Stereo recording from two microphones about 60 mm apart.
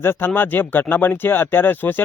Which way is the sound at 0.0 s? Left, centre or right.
Left.